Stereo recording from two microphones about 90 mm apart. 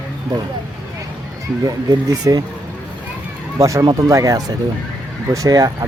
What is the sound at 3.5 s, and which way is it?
Speech, 35° right (ahead or behind).